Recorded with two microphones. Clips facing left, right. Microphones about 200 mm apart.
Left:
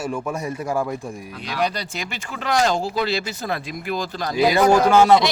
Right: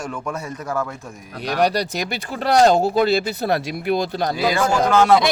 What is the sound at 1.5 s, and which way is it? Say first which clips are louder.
Speech: right 5 dB; 65° right (ahead or behind).